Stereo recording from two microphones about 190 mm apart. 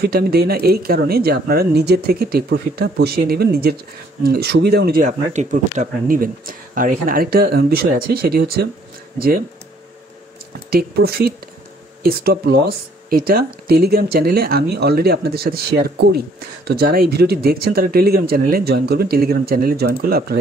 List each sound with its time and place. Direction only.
0.0 s speech: 55° right (ahead or behind)
5.0 s speech: 40° right (ahead or behind)
10.7 s speech: 55° right (ahead or behind)